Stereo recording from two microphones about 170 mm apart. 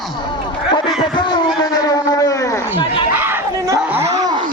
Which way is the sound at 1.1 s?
25° left (ahead or behind).